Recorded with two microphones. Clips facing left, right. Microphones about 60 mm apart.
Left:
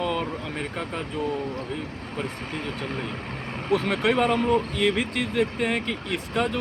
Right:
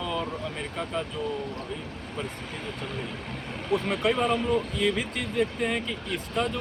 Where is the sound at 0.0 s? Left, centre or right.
Left.